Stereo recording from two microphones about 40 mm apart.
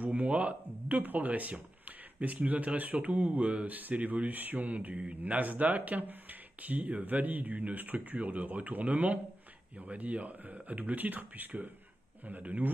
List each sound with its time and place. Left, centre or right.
0.0 s speech: right
3.6 s speech: right